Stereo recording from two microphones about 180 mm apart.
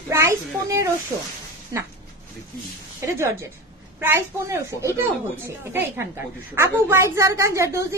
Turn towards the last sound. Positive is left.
turn(degrees=-15)  # may be behind; listen again after turning